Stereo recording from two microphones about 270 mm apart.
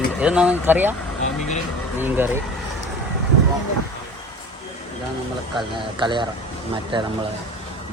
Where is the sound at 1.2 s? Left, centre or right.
Left.